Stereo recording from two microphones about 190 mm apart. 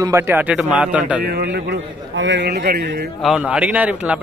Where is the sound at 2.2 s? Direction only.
70° right (ahead or behind).